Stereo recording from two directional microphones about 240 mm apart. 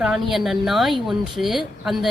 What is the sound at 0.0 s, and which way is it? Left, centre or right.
Speech, centre.